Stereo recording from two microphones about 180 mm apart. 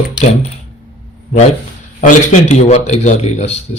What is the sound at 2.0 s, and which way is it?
A man's voice, 40° left (ahead or behind).